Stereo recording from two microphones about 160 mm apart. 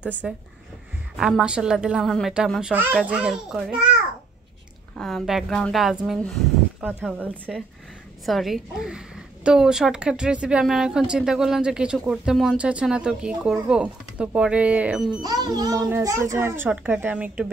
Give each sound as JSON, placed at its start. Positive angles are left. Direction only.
{"t": 0.0, "sound": "a woman's voice", "side_deg": -10}
{"t": 4.9, "sound": "a woman's voice", "side_deg": 0}
{"t": 15.2, "sound": "a woman's voice", "side_deg": -25}